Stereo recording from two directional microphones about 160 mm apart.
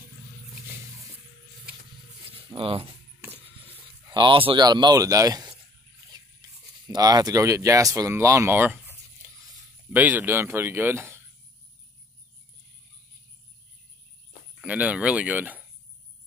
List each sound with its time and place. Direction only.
2.3 s speech: 35° right (ahead or behind)
4.1 s speech: 30° right (ahead or behind)
6.9 s speech: 25° right (ahead or behind)
9.9 s speech: 10° right (ahead or behind)
14.5 s speech: 5° right (ahead or behind)